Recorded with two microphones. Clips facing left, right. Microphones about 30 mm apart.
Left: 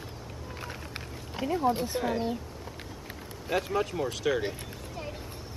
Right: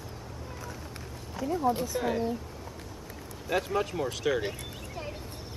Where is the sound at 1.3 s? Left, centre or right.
Left.